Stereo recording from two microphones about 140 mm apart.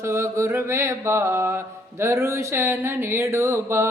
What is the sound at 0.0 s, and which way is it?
Speech, 20° right (ahead or behind).